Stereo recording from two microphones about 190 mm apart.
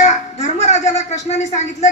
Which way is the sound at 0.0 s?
35° left (ahead or behind).